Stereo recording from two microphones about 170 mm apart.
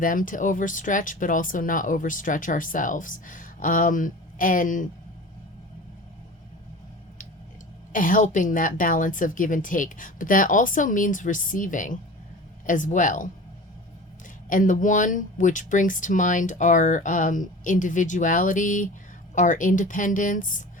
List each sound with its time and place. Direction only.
0.0 s speech: 50° left (ahead or behind)
7.9 s speech: 50° left (ahead or behind)
14.5 s speech: 50° left (ahead or behind)